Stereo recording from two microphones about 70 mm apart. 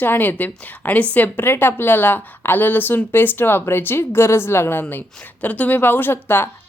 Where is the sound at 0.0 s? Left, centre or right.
Left.